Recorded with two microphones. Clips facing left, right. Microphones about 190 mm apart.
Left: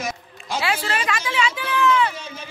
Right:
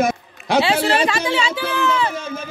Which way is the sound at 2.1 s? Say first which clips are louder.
Right 8 dB; 50° right (ahead or behind).